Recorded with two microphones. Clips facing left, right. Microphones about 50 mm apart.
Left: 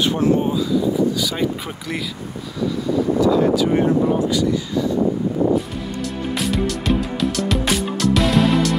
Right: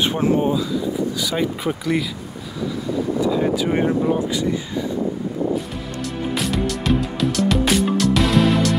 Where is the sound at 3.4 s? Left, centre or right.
Centre.